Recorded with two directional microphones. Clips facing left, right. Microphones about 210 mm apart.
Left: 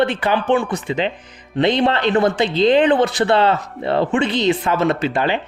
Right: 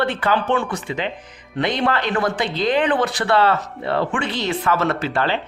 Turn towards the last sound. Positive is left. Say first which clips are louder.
# left 3 dB
turn(degrees=15)  # may be behind; listen again after turning